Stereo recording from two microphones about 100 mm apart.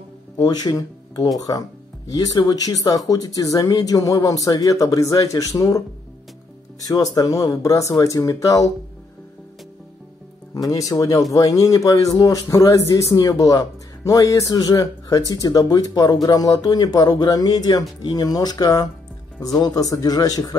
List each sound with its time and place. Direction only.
0.4 s speech: 40° left (ahead or behind)
6.8 s speech: 35° left (ahead or behind)
10.5 s speech: 35° left (ahead or behind)